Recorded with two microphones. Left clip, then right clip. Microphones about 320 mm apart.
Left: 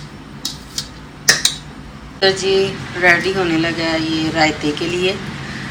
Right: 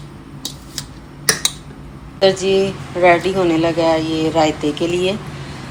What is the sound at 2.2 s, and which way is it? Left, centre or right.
Speech, centre.